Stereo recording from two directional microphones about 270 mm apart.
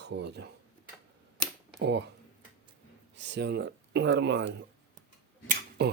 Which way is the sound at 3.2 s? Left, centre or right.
Right.